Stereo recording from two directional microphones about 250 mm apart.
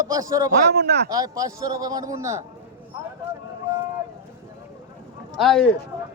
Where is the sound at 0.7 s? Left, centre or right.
Right.